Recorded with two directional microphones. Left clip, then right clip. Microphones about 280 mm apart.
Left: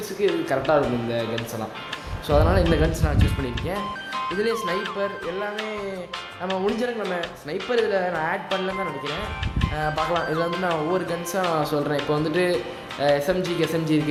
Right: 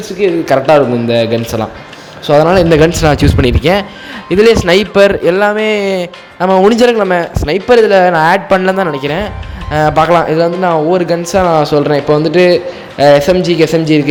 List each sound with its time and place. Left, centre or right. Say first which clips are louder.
0.2 s speech: right 13 dB; right